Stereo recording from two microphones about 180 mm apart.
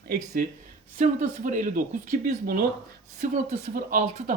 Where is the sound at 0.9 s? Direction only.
45° right (ahead or behind).